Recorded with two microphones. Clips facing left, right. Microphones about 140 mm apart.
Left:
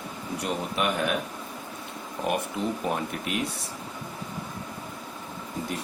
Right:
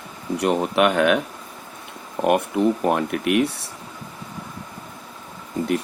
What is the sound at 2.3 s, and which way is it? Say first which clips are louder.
Speech: right 10 dB; 60° right (ahead or behind).